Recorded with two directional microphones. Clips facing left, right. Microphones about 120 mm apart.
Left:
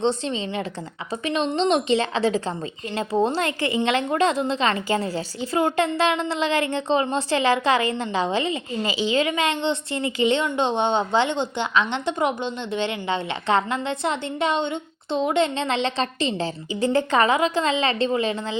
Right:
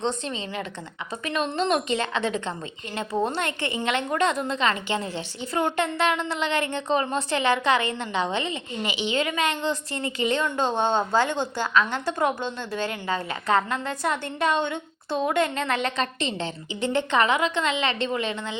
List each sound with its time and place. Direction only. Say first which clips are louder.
0.0 s a woman's voice: left 5 dB; 30° left (ahead or behind)